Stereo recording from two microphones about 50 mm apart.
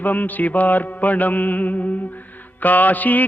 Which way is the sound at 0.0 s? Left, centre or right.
Left.